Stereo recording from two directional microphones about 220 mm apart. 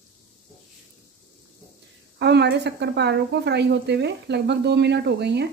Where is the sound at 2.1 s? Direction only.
50° right (ahead or behind).